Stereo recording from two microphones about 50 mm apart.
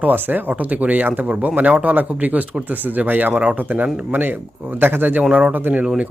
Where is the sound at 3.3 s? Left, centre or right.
Centre.